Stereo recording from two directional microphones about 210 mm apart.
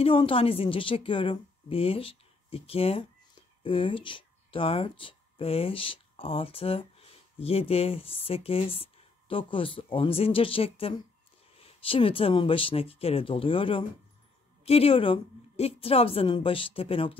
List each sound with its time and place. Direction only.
0.0 s a woman's voice: 25° left (ahead or behind)